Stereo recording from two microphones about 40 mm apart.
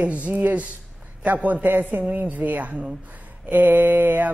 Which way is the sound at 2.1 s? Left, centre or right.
Right.